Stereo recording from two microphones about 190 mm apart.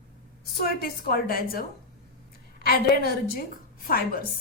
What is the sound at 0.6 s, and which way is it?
A woman's voice, 50° left (ahead or behind).